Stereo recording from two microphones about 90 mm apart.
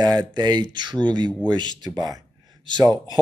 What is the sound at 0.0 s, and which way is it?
Speech, 50° right (ahead or behind).